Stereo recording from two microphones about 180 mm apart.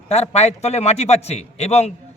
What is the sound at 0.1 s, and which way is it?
A man's voice, 35° left (ahead or behind).